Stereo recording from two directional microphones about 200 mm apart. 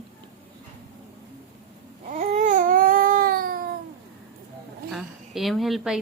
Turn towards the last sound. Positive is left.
turn(degrees=0)  # may be behind; listen again after turning